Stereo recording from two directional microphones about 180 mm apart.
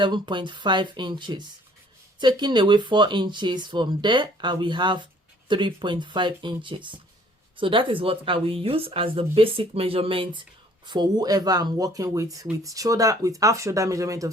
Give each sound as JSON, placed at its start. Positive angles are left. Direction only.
{"t": 0.0, "sound": "speech", "side_deg": -25}